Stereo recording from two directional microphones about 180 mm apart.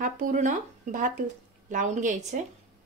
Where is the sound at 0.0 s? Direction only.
45° right (ahead or behind).